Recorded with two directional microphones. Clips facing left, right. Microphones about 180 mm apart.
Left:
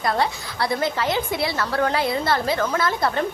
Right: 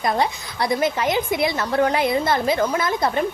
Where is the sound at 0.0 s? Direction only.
20° right (ahead or behind).